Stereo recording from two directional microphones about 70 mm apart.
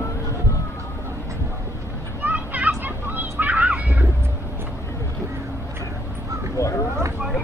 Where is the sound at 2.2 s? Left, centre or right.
Right.